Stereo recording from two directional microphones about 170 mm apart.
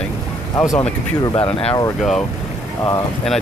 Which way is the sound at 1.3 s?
30° left (ahead or behind).